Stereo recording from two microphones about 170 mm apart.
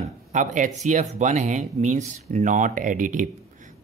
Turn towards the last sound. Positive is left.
turn(degrees=-50)  # may be behind; listen again after turning